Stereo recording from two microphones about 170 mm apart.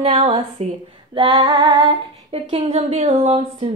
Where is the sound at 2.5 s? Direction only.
40° right (ahead or behind).